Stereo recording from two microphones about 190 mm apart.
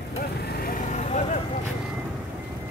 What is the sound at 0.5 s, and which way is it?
Vehicle, 50° left (ahead or behind).